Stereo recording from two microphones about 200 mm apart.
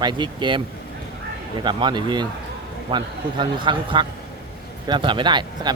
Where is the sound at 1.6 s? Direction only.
20° right (ahead or behind).